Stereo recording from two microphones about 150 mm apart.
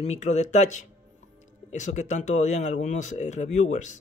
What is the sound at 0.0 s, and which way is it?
Speech, 45° left (ahead or behind).